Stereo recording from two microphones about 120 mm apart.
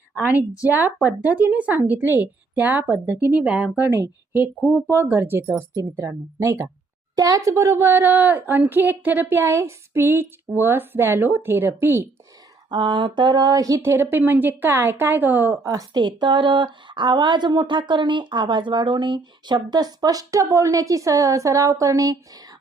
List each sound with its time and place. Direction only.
0.6 s a woman's voice: 15° right (ahead or behind)
12.7 s speech: 40° right (ahead or behind)